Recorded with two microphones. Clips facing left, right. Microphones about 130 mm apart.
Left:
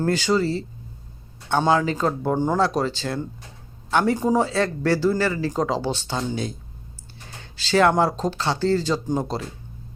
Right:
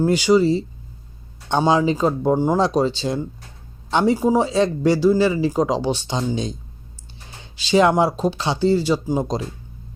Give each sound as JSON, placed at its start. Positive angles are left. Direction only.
{"t": 0.0, "sound": "speech", "side_deg": -15}